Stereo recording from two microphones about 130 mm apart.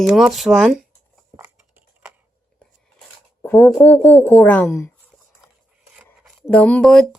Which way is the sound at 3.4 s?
15° left (ahead or behind).